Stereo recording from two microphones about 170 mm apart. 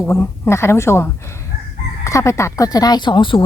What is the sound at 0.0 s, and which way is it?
A woman's voice, 15° left (ahead or behind).